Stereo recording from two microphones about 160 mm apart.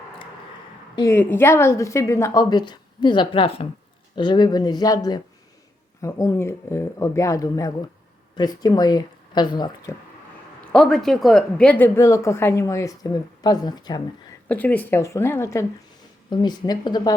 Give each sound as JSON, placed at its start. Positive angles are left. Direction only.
{"t": 0.9, "sound": "a woman's voice", "side_deg": 15}
{"t": 10.7, "sound": "a woman's voice", "side_deg": 5}
{"t": 14.4, "sound": "a woman's voice", "side_deg": 10}
{"t": 16.3, "sound": "a woman's voice", "side_deg": 25}